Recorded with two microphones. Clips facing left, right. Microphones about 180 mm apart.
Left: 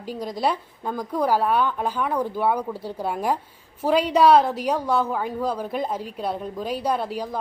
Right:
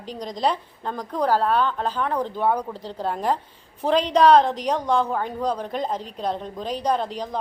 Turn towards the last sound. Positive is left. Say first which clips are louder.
# right 1 dB
turn(degrees=5)  # may be behind; listen again after turning